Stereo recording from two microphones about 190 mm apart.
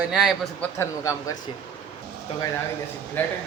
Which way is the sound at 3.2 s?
10° left (ahead or behind).